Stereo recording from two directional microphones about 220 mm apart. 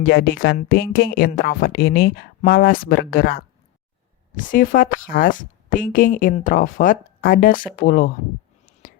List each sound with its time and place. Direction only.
0.0 s a woman's voice: 45° left (ahead or behind)